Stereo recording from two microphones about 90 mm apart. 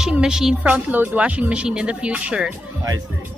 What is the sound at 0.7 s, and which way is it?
Speech, 15° right (ahead or behind).